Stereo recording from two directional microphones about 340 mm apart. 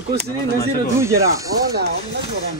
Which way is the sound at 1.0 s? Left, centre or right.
Centre.